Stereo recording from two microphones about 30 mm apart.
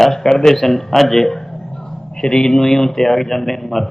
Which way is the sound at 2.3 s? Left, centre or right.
Centre.